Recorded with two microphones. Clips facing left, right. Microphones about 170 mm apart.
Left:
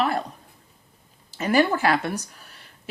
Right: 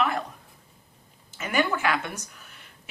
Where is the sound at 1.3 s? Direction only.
35° left (ahead or behind).